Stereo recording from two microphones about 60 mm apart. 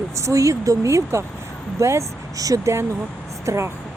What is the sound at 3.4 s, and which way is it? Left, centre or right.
Speech, right.